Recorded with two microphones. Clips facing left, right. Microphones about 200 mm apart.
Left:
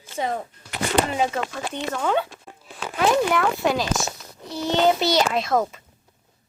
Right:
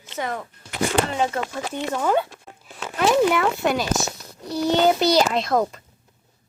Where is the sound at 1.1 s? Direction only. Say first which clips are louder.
Even; 10° left (ahead or behind).